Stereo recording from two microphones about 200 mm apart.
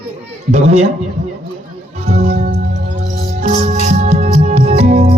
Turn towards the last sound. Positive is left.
turn(degrees=-30)  # may be behind; listen again after turning